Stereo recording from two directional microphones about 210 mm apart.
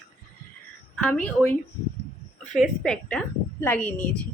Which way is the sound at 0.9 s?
5° left (ahead or behind).